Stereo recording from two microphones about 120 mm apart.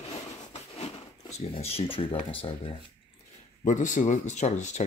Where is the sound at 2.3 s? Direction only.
50° left (ahead or behind).